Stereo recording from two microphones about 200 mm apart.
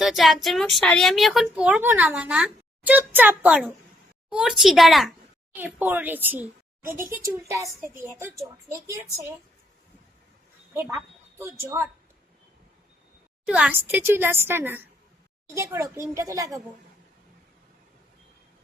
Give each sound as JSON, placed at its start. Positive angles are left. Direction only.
{"t": 0.0, "sound": "a woman's voice", "side_deg": 0}
{"t": 10.8, "sound": "a woman's voice", "side_deg": -10}
{"t": 13.4, "sound": "a woman's voice", "side_deg": -5}